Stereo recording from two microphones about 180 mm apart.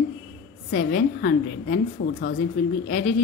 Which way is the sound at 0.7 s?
60° left (ahead or behind).